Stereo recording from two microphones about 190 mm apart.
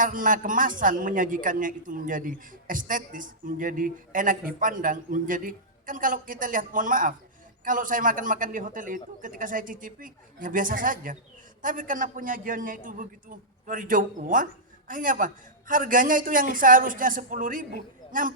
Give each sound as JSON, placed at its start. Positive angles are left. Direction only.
{"t": 0.0, "sound": "a man's voice", "side_deg": -45}